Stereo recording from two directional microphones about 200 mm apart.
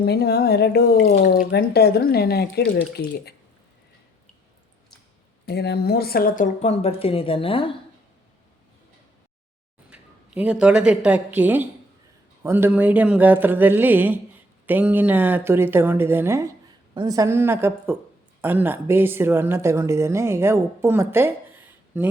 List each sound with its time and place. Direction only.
0.0 s speech: 50° left (ahead or behind)
5.5 s a woman's voice: 55° left (ahead or behind); by 7.8 s 25° left (ahead or behind)
9.9 s a woman's voice: 5° right (ahead or behind)